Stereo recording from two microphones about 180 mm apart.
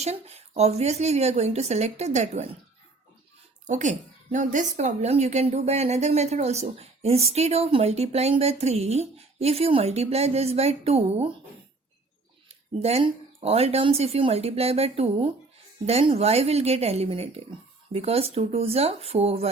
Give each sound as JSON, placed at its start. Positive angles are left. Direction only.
{"t": 0.0, "sound": "speech", "side_deg": -35}
{"t": 3.7, "sound": "speech", "side_deg": -40}
{"t": 12.8, "sound": "speech", "side_deg": -35}